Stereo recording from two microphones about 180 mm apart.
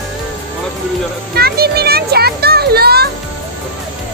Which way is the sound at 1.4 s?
60° right (ahead or behind).